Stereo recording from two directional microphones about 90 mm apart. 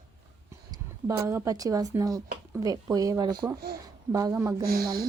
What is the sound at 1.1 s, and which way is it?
Speech, 35° right (ahead or behind).